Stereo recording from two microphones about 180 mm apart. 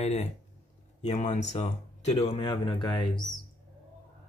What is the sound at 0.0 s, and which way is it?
Speech, 40° left (ahead or behind).